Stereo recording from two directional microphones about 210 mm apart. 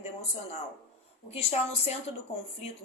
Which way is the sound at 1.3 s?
30° left (ahead or behind).